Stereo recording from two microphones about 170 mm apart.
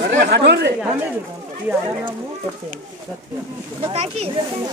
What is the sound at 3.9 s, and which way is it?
Speech, 40° right (ahead or behind).